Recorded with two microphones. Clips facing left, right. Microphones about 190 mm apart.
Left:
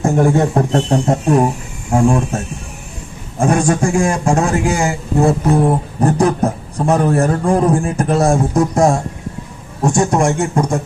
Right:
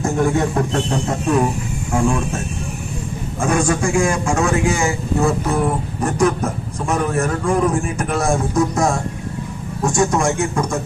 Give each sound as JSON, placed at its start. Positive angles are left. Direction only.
{"t": 0.2, "sound": "a man's voice", "side_deg": 35}